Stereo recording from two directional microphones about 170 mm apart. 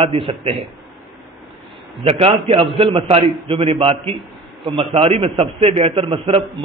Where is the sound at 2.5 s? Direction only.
30° right (ahead or behind).